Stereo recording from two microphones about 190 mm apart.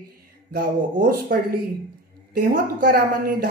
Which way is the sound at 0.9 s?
45° right (ahead or behind).